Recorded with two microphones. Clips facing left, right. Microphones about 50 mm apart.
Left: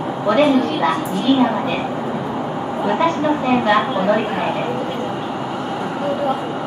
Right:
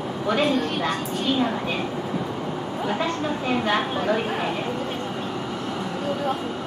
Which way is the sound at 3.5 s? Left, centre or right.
Centre.